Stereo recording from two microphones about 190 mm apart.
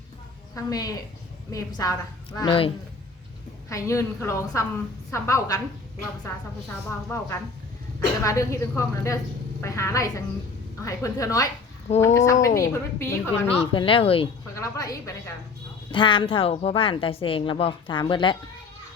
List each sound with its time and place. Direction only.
0.5 s a woman's voice: 20° left (ahead or behind)
13.5 s a woman's voice: 30° left (ahead or behind)
14.5 s a woman's voice: 15° left (ahead or behind)